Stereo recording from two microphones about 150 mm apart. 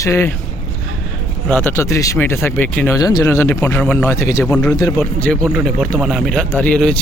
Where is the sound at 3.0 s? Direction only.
25° left (ahead or behind).